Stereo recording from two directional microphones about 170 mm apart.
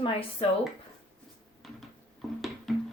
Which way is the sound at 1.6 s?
Centre (ahead or behind).